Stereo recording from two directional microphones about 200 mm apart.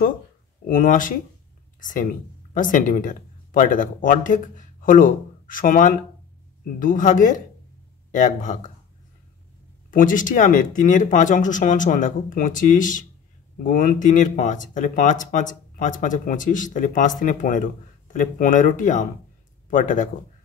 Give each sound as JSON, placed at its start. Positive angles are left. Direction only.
{"t": 0.7, "sound": "speech", "side_deg": 40}
{"t": 9.8, "sound": "speech", "side_deg": 40}